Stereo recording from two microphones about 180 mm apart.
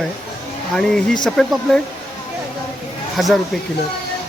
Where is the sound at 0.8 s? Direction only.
5° left (ahead or behind).